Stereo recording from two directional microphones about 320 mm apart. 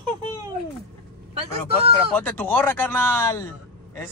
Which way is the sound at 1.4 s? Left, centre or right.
Centre.